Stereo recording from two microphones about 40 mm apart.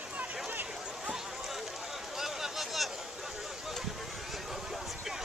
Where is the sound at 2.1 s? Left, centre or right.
Centre.